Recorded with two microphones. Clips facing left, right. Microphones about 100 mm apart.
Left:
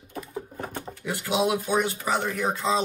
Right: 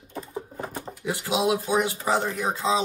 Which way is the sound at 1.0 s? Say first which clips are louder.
Right 1 dB; 15° right (ahead or behind).